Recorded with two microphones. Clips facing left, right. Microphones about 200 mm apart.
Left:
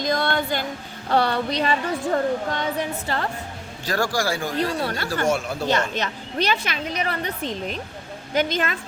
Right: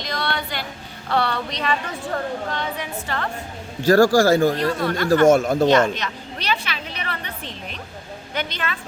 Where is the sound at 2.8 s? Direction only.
35° left (ahead or behind).